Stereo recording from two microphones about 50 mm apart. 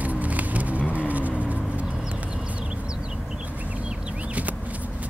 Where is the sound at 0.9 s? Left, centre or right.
Right.